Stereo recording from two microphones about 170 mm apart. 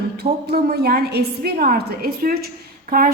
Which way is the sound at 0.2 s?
70° right (ahead or behind).